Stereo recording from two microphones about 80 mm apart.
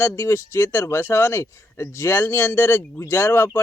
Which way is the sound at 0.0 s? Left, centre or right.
Left.